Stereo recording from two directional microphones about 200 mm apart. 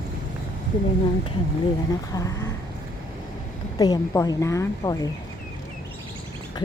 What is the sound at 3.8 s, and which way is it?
A woman's voice, 20° left (ahead or behind).